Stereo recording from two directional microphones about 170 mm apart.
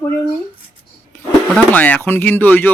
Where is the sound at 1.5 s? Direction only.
10° left (ahead or behind).